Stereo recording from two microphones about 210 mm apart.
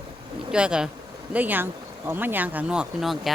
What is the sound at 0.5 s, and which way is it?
Speech, 5° right (ahead or behind).